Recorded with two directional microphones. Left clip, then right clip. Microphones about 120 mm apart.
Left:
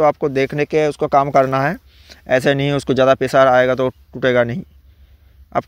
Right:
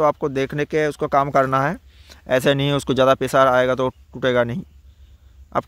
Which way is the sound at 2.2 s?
5° left (ahead or behind).